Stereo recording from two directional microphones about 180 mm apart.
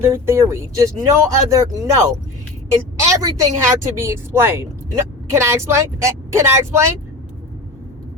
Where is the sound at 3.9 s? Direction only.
15° right (ahead or behind).